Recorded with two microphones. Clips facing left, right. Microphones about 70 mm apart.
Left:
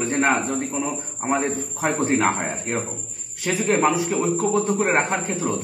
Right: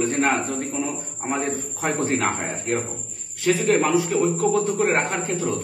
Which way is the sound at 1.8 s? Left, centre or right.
Left.